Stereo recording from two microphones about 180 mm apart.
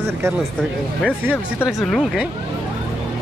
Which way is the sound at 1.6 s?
Centre (ahead or behind).